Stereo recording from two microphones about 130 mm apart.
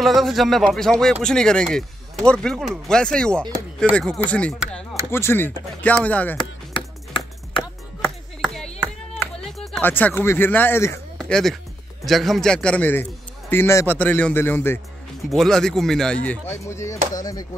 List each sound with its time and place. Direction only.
0.0 s a man's voice: centre (ahead or behind)
6.3 s chopping: 40° left (ahead or behind)
8.4 s clapping: 5° left (ahead or behind)
9.4 s speech: 5° left (ahead or behind)
11.1 s music: 5° left (ahead or behind)
12.0 s a man's voice: centre (ahead or behind); by 14.8 s 15° left (ahead or behind)
15.2 s speech: centre (ahead or behind)
16.5 s speech: 20° left (ahead or behind)